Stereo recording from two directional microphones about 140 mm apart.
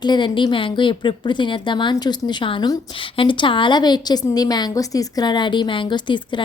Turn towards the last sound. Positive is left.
turn(degrees=35)  # may be behind; listen again after turning